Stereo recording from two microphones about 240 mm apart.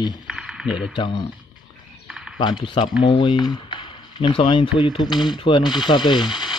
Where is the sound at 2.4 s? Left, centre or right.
Centre.